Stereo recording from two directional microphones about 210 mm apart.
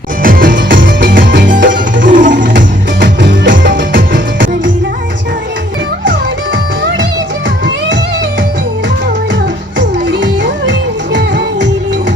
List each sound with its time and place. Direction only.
0.2 s music: 40° right (ahead or behind)
3.0 s music: 60° right (ahead or behind)
3.5 s music: 40° right (ahead or behind)
9.7 s music: 60° right (ahead or behind)